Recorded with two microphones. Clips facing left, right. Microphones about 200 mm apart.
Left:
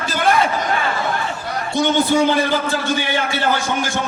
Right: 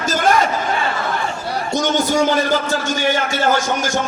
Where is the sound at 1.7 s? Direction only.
45° right (ahead or behind).